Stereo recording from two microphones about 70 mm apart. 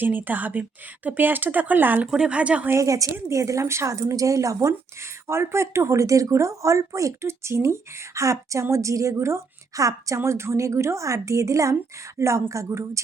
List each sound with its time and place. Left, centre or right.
0.0 s speech: right
2.0 s speech: centre
2.6 s speech: right
5.3 s speech: right
10.2 s speech: right